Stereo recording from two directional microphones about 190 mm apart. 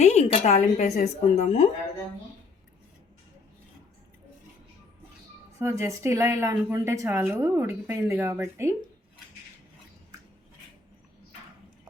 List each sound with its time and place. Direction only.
0.0 s a woman's voice: 35° left (ahead or behind)
5.5 s a woman's voice: 15° right (ahead or behind)